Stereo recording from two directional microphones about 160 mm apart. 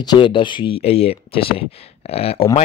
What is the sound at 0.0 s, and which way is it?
Speech, 30° left (ahead or behind).